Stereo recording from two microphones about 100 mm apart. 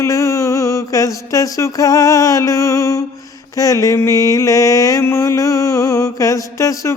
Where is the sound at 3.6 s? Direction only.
35° left (ahead or behind).